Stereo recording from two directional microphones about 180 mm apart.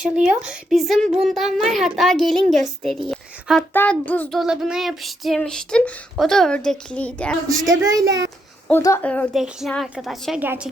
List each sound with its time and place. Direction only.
0.0 s a woman's voice: 5° right (ahead or behind)
7.7 s a child's voice: 20° right (ahead or behind)
8.8 s a woman's voice: 15° left (ahead or behind); by 10.7 s 10° right (ahead or behind)